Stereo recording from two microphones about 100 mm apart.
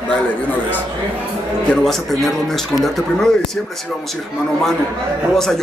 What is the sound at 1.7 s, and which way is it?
A man's voice, 5° left (ahead or behind).